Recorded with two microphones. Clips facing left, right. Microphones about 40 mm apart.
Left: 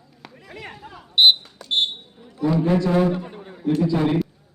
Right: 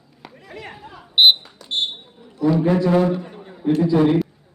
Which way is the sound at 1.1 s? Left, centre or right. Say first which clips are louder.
Right 1 dB; centre.